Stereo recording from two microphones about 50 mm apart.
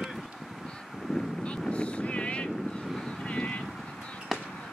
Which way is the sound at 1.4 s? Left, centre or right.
Left.